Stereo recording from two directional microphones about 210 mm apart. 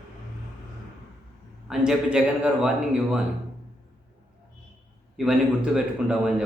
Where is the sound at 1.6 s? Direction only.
Centre (ahead or behind).